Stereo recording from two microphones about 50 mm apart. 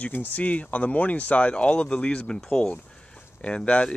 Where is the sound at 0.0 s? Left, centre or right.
Left.